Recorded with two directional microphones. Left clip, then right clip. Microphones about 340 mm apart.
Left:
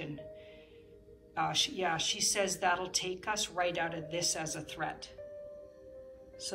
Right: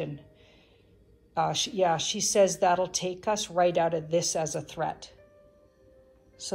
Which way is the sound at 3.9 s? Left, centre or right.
Right.